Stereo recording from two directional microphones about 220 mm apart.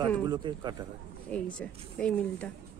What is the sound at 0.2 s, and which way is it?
Speech, 20° right (ahead or behind).